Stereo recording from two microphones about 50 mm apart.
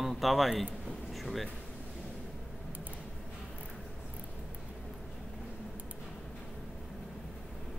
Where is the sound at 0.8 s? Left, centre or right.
Centre.